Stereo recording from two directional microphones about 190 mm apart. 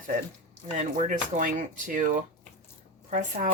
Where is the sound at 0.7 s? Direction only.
40° right (ahead or behind).